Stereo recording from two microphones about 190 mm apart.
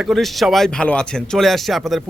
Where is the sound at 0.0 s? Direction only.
Centre (ahead or behind).